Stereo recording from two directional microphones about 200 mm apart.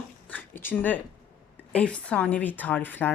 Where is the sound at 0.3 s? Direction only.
10° left (ahead or behind).